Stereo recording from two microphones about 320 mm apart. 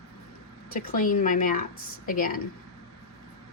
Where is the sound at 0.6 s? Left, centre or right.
Left.